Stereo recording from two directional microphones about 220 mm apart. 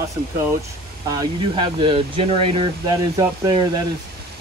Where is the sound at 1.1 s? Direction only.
20° right (ahead or behind).